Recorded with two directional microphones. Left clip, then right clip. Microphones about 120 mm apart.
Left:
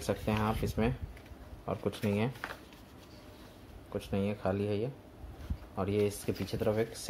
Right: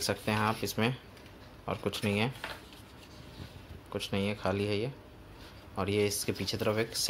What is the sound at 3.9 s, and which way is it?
Speech, 15° left (ahead or behind).